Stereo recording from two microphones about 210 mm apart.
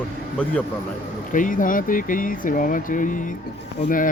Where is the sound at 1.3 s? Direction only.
40° left (ahead or behind).